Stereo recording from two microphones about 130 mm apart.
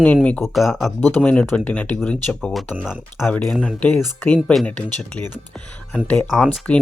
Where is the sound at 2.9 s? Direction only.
15° left (ahead or behind).